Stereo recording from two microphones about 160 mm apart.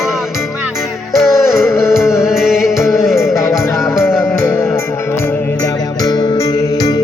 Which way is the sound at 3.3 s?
20° left (ahead or behind).